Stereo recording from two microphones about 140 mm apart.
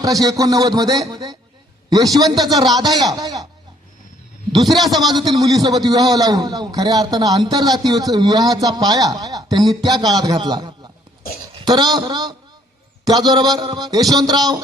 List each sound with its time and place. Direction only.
0.0 s a man's voice: 25° right (ahead or behind)
4.5 s a man's voice: centre (ahead or behind)
5.3 s a man's voice: 25° right (ahead or behind)